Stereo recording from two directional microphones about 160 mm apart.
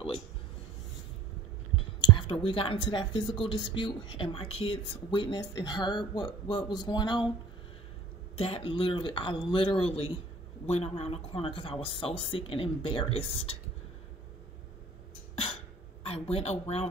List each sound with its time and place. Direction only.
2.0 s whispering: 30° left (ahead or behind)
2.4 s speech: 35° left (ahead or behind)
8.4 s speech: 35° left (ahead or behind)
16.0 s speech: 35° left (ahead or behind)